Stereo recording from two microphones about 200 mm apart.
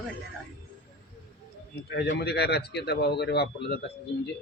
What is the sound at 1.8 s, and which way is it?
A man's voice, 55° left (ahead or behind).